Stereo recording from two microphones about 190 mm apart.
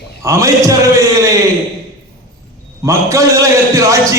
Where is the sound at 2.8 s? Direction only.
15° right (ahead or behind).